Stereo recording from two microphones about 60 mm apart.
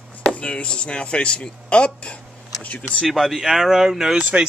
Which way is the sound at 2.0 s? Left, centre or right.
Centre.